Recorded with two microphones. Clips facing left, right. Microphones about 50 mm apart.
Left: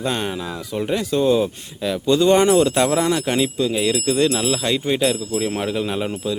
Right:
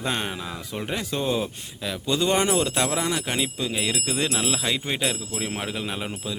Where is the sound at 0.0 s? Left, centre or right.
Centre.